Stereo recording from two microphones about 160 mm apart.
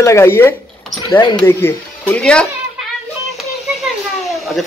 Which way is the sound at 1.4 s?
15° left (ahead or behind).